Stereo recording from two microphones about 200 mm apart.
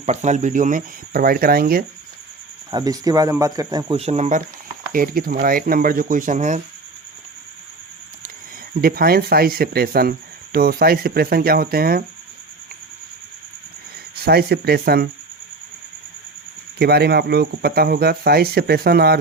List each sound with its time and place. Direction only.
0.0 s speech: 35° right (ahead or behind)
2.6 s speech: 20° right (ahead or behind); by 4.4 s 35° right (ahead or behind)
4.9 s speech: 45° right (ahead or behind)
8.7 s speech: 50° right (ahead or behind)
14.3 s speech: 50° right (ahead or behind)
16.7 s speech: 50° right (ahead or behind)